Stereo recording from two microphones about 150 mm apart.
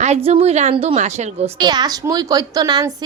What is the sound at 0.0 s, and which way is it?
A woman's voice, 45° right (ahead or behind).